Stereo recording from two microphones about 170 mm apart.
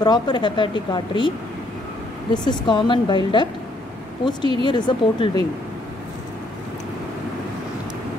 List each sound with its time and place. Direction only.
0.0 s speech: 25° left (ahead or behind)
2.4 s speech: 25° left (ahead or behind)